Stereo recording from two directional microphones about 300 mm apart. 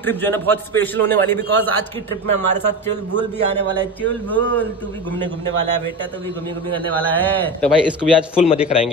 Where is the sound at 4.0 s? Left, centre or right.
Centre.